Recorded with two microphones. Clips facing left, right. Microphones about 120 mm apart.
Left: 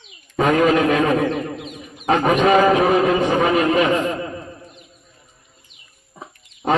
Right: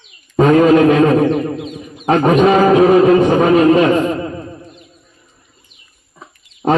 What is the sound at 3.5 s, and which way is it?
Speech, 25° right (ahead or behind).